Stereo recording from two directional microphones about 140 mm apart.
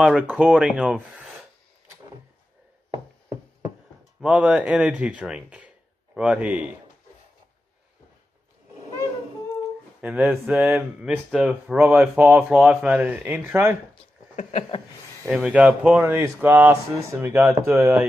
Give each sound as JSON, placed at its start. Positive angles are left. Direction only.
{"t": 0.2, "sound": "speech", "side_deg": -5}
{"t": 4.2, "sound": "speech", "side_deg": -5}
{"t": 10.0, "sound": "speech", "side_deg": -10}
{"t": 15.2, "sound": "speech", "side_deg": 0}